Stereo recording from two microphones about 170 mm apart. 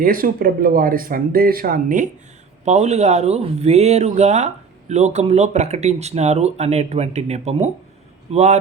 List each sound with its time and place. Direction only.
0.0 s speech: 55° right (ahead or behind)
2.6 s speech: 40° right (ahead or behind)